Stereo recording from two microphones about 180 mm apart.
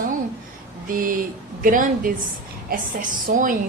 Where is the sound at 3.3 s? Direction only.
50° right (ahead or behind).